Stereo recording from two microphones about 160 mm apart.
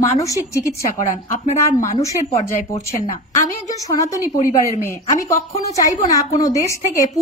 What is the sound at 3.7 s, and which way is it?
A woman's voice, 20° left (ahead or behind).